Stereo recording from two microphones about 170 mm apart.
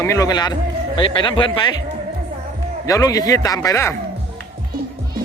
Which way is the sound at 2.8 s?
20° left (ahead or behind).